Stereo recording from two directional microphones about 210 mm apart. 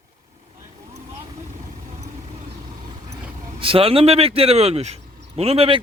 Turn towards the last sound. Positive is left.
turn(degrees=-25)  # may be behind; listen again after turning